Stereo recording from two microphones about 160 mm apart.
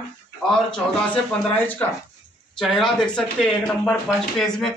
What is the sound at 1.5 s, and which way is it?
Speech, 10° left (ahead or behind).